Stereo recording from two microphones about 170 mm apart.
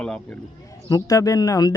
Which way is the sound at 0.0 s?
5° left (ahead or behind).